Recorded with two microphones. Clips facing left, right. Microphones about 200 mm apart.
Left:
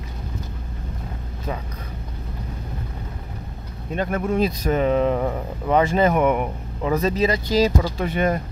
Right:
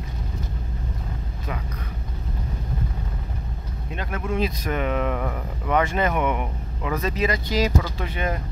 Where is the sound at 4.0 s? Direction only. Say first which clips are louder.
Left 5 dB; 45° left (ahead or behind).